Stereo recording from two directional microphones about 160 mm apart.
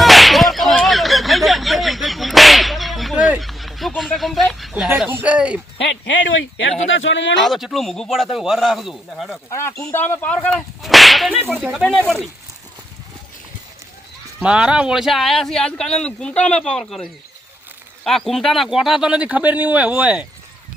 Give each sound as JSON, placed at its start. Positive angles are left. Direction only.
{"t": 0.0, "sound": "whip", "side_deg": 0}
{"t": 4.9, "sound": "a sound", "side_deg": -10}
{"t": 5.8, "sound": "speech", "side_deg": 90}
{"t": 7.4, "sound": "speech", "side_deg": 0}
{"t": 9.5, "sound": "whip", "side_deg": 20}
{"t": 11.6, "sound": "speech", "side_deg": 0}
{"t": 14.3, "sound": "speech", "side_deg": -5}